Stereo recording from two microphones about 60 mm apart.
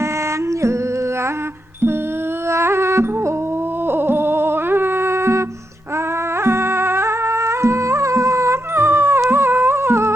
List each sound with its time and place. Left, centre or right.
2.5 s music: right
6.4 s music: right
9.3 s a sound: right